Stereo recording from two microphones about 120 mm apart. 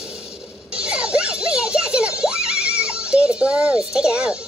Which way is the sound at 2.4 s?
10° right (ahead or behind).